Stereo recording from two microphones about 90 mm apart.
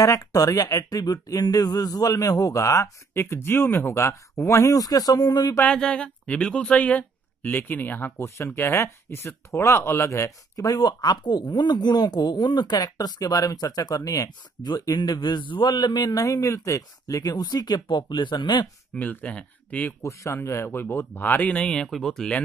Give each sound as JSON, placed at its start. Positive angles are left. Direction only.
{"t": 0.0, "sound": "speech", "side_deg": 40}
{"t": 5.6, "sound": "speech", "side_deg": 15}
{"t": 18.9, "sound": "speech", "side_deg": 15}
{"t": 20.0, "sound": "a man's voice", "side_deg": 30}